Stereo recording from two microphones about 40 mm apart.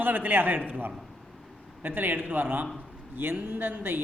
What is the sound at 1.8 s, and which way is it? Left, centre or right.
A man's voice, right.